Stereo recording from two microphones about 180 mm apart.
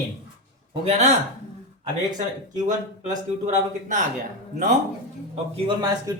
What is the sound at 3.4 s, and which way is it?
Speech, 40° right (ahead or behind).